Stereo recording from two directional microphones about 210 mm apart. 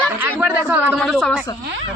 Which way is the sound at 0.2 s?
10° right (ahead or behind).